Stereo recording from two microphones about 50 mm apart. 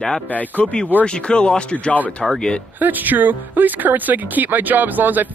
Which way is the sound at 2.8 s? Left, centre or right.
Right.